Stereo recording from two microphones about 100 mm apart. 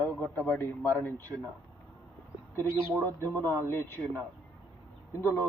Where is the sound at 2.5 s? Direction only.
20° left (ahead or behind).